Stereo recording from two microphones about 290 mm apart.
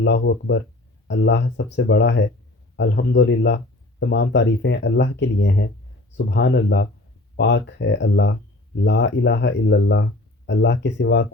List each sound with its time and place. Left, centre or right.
0.0 s speech: left